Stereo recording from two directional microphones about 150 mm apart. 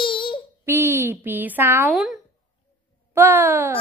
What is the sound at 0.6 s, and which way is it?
A woman's voice, 15° right (ahead or behind).